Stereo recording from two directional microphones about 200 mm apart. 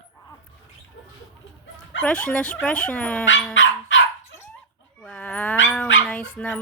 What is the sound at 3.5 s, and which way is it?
Dog, 70° left (ahead or behind).